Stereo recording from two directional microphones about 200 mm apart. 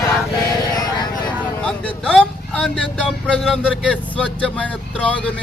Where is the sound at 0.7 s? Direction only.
20° left (ahead or behind).